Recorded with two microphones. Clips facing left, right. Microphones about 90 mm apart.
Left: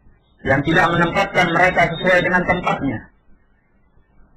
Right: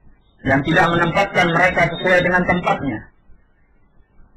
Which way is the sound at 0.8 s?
Centre (ahead or behind).